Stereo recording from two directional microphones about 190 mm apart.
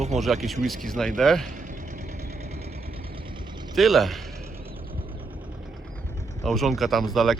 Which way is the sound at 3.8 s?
Centre (ahead or behind).